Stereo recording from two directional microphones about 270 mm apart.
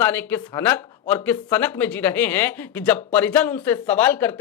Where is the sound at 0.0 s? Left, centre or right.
Centre.